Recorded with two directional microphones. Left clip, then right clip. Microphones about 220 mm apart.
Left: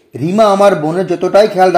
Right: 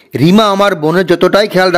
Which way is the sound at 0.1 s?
35° right (ahead or behind).